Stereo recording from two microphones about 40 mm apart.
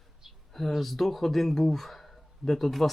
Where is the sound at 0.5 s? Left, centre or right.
Centre.